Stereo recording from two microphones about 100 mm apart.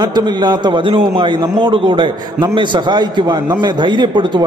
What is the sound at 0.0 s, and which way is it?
A man's voice, 45° right (ahead or behind).